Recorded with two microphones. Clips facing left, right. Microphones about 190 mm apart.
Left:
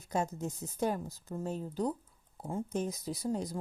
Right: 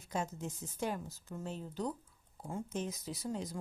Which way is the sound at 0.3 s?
40° left (ahead or behind).